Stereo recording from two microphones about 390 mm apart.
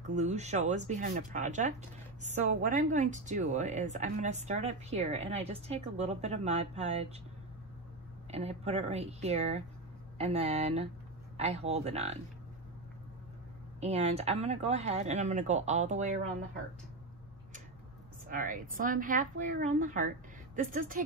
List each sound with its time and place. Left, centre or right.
0.1 s speech: centre
8.3 s speech: centre
13.7 s speech: centre
18.3 s a woman's voice: right